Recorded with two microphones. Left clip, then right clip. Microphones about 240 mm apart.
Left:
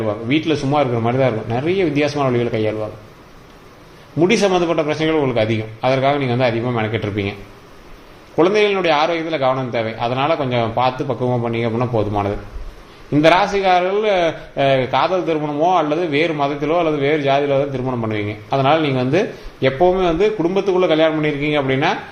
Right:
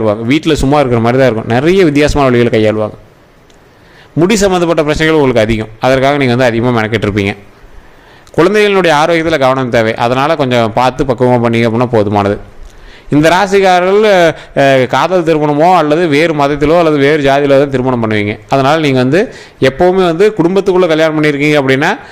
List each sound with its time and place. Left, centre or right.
0.0 s a man's voice: right
4.3 s a man's voice: right
8.4 s a man's voice: right